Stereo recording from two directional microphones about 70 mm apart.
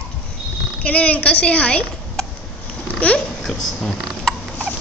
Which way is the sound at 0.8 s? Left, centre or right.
Centre.